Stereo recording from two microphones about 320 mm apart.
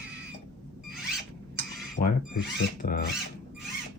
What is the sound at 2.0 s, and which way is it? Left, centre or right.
Speech, left.